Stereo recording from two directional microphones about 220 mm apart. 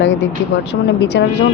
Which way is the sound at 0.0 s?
55° left (ahead or behind).